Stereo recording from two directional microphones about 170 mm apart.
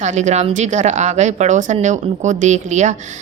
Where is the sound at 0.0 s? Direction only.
45° right (ahead or behind).